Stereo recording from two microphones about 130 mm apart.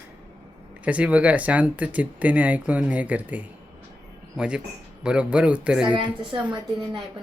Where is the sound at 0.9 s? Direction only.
10° right (ahead or behind).